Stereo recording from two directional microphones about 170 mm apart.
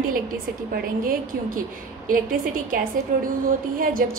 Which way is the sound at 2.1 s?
50° right (ahead or behind).